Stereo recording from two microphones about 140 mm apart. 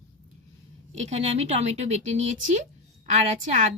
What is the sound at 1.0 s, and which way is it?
A woman's voice, 50° right (ahead or behind).